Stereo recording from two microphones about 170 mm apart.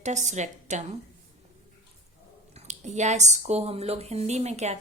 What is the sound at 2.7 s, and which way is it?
A woman's voice, 45° right (ahead or behind).